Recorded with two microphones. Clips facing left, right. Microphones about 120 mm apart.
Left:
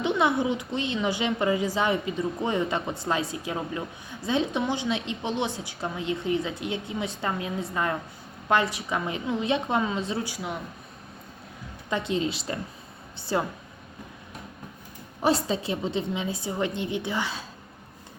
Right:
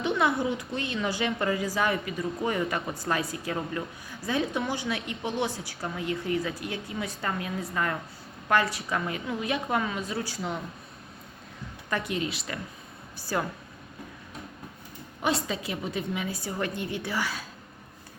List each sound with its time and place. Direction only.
0.0 s a woman's voice: 20° left (ahead or behind)
10.3 s speech: 5° left (ahead or behind)
11.9 s a woman's voice: 25° left (ahead or behind)
15.4 s a woman's voice: 25° left (ahead or behind)